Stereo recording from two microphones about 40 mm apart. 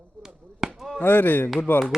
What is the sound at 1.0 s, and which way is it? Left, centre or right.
Speech, left.